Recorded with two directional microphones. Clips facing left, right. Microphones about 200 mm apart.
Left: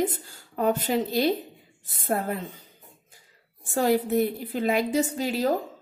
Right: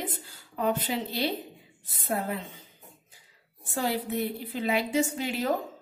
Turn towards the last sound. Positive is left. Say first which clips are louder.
# left 4 dB
turn(degrees=35)  # may be behind; listen again after turning